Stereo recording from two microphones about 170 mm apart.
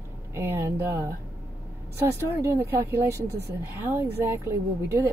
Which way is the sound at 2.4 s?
15° right (ahead or behind).